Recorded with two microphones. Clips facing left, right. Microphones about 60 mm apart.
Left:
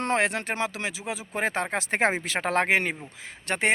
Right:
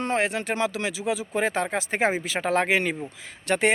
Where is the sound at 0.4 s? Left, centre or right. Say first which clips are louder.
Right 3 dB; left.